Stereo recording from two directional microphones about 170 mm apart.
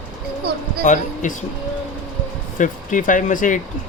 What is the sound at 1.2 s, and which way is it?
Speech, 50° left (ahead or behind).